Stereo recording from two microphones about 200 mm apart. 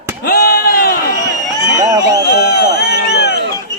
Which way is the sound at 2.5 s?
55° left (ahead or behind).